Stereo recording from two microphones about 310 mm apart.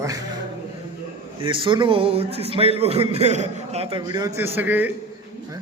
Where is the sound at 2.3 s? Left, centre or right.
Centre.